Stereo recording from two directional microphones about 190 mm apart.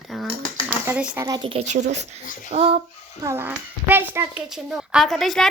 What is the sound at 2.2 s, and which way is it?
Speech, 45° left (ahead or behind).